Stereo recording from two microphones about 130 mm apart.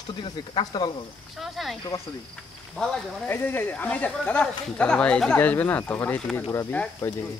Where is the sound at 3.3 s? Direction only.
15° left (ahead or behind).